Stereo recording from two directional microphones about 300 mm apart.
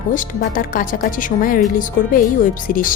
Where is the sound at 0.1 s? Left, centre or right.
Left.